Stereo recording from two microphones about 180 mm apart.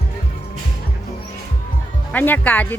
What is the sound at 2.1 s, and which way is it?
Speech, 10° left (ahead or behind).